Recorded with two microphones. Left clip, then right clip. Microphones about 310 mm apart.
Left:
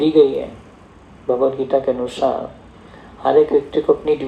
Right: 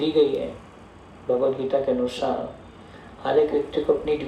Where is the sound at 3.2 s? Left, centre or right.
Centre.